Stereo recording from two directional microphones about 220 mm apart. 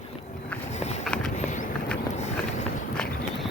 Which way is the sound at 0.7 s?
30° left (ahead or behind).